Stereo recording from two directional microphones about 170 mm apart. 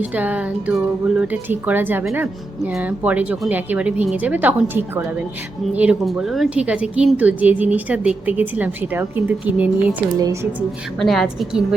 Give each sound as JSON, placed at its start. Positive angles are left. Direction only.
{"t": 0.0, "sound": "speech", "side_deg": -10}
{"t": 10.2, "sound": "a woman's voice", "side_deg": -20}
{"t": 11.0, "sound": "a woman's voice", "side_deg": 0}